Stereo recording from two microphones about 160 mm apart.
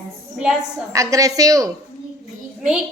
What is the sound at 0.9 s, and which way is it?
Speech, 20° right (ahead or behind).